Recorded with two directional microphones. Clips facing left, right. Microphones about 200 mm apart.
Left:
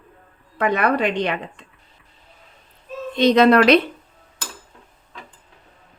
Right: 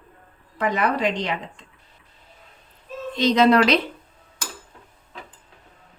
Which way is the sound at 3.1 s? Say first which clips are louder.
Left 3 dB; 60° left (ahead or behind).